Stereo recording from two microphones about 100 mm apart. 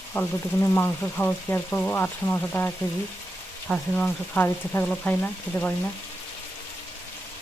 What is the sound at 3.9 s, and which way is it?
Frying, 15° left (ahead or behind).